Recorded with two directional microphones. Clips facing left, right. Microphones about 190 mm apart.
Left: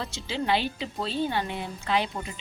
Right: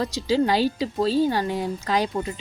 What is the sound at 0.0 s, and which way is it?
A woman's voice, 40° right (ahead or behind).